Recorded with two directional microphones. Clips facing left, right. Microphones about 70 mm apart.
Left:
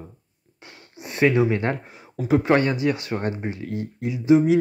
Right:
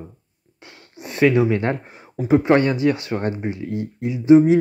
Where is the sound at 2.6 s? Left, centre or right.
Left.